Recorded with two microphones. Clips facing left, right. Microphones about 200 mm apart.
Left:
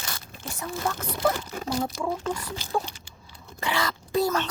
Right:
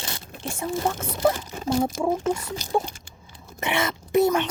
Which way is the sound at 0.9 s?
25° right (ahead or behind).